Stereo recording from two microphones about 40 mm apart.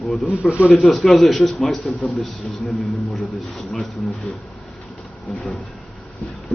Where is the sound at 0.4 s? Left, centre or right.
Centre.